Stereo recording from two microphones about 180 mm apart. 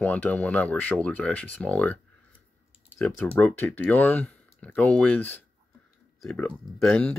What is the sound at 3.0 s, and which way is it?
Speech, 10° left (ahead or behind).